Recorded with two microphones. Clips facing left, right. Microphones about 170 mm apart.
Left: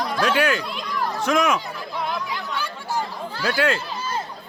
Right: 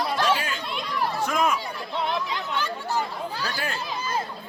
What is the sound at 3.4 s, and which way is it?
Speech, 90° left.